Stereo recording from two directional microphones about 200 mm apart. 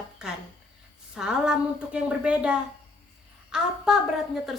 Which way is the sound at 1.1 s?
5° right (ahead or behind).